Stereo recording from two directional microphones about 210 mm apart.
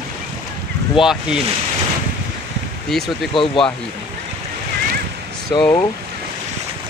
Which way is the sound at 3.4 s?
25° left (ahead or behind).